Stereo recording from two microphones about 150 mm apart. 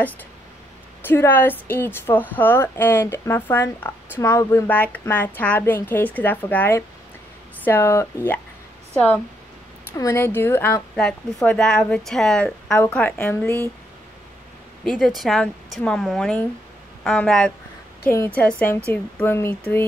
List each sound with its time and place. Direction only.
1.0 s a woman's voice: 15° left (ahead or behind)
14.9 s a woman's voice: 5° left (ahead or behind)